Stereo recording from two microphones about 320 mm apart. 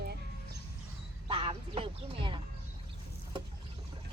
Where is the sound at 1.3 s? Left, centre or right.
Centre.